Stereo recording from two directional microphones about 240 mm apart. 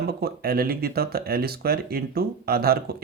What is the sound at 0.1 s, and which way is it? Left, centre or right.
Speech, right.